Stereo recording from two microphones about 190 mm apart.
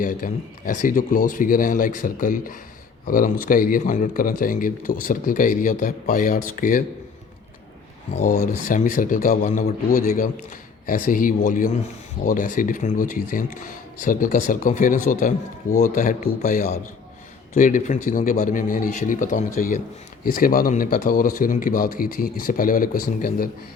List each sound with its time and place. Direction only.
0.0 s speech: 45° left (ahead or behind)
8.1 s speech: 40° left (ahead or behind)
9.6 s speech: 50° left (ahead or behind)